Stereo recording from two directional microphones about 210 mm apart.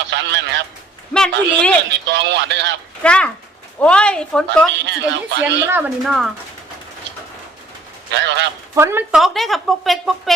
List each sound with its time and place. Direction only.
0.1 s a man's voice: 55° right (ahead or behind)
1.1 s a woman's voice: 5° left (ahead or behind)
1.9 s speech: 55° right (ahead or behind)
3.0 s a woman's voice: 5° left (ahead or behind)
4.9 s speech: 55° right (ahead or behind)
5.7 s a woman's voice: 5° right (ahead or behind)
8.1 s speech: 55° right (ahead or behind)
8.7 s speech: 10° right (ahead or behind)
9.1 s a woman's voice: centre (ahead or behind)